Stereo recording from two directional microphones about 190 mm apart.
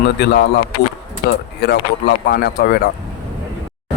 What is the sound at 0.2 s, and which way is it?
Speech, 60° left (ahead or behind).